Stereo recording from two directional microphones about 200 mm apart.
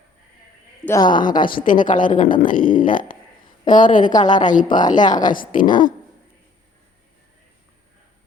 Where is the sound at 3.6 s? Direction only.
40° left (ahead or behind).